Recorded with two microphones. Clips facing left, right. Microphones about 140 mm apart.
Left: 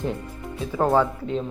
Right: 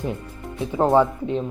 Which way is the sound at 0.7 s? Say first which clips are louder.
Right 3 dB; 20° right (ahead or behind).